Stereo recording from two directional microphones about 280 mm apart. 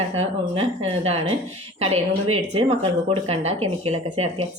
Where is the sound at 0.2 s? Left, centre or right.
Right.